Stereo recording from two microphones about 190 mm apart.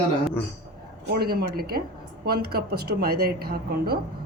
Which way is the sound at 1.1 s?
55° right (ahead or behind).